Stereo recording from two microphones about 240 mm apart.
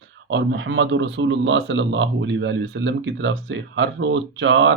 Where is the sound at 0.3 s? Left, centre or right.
Right.